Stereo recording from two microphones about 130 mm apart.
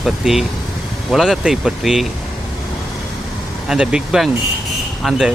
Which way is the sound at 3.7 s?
5° right (ahead or behind).